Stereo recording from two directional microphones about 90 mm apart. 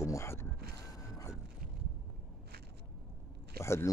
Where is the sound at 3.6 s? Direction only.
30° left (ahead or behind).